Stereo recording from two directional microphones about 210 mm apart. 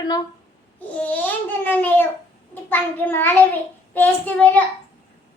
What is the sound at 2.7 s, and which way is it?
Child singing, 10° left (ahead or behind).